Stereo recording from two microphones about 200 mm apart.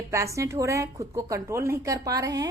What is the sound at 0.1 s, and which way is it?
A woman's voice, 15° right (ahead or behind).